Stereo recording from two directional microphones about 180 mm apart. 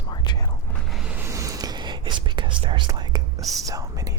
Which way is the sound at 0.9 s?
5° right (ahead or behind).